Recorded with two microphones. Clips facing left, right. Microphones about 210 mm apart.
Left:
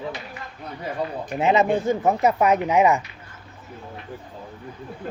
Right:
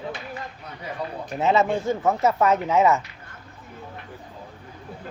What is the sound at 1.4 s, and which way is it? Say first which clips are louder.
Speech: left 2 dB; 15° left (ahead or behind).